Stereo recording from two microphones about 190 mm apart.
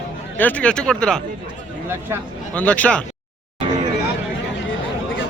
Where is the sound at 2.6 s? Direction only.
5° left (ahead or behind).